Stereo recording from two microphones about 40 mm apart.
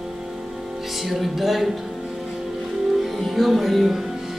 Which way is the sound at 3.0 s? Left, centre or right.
Centre.